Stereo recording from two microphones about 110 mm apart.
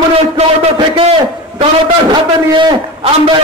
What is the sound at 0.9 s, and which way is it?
A man's voice, 50° right (ahead or behind).